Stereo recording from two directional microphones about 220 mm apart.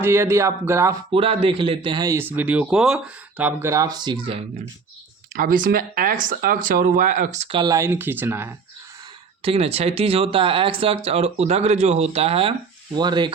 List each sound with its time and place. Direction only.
0.0 s speech: 10° right (ahead or behind)
1.1 s speech: 25° right (ahead or behind)
5.3 s speech: 40° right (ahead or behind); by 8.5 s 10° right (ahead or behind)
9.4 s speech: 25° right (ahead or behind)